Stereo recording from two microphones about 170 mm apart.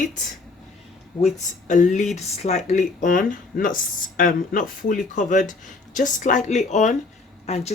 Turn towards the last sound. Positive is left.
turn(degrees=40)  # may be behind; listen again after turning